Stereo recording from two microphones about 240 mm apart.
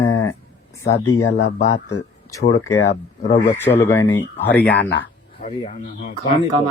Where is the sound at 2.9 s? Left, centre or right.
Left.